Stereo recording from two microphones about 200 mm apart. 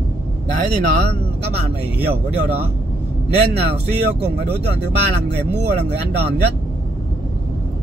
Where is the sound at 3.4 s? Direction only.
55° right (ahead or behind).